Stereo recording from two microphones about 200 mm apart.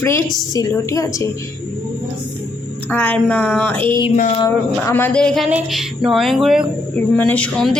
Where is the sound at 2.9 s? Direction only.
10° left (ahead or behind).